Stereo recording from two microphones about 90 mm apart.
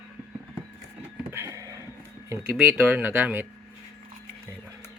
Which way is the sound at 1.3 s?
30° right (ahead or behind).